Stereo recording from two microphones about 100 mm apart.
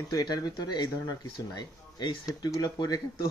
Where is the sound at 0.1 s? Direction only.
40° left (ahead or behind).